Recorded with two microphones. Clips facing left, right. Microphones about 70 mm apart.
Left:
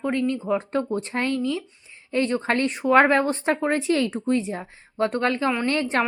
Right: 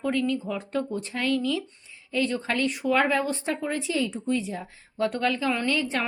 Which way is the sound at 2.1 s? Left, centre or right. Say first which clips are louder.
Left 4 dB; left.